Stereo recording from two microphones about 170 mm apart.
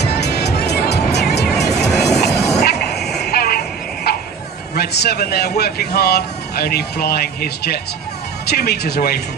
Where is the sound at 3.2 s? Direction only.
65° left (ahead or behind).